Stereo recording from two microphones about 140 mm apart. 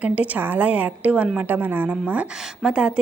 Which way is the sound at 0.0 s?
10° right (ahead or behind).